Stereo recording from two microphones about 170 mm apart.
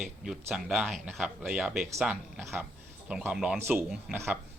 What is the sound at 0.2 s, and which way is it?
A man's voice, 5° right (ahead or behind).